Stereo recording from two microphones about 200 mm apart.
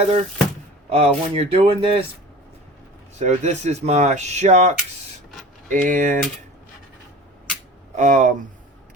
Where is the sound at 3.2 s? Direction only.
35° right (ahead or behind).